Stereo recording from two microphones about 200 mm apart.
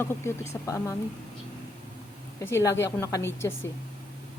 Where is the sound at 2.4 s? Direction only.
15° left (ahead or behind).